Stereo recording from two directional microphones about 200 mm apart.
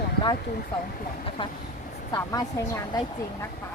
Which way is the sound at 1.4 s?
25° left (ahead or behind).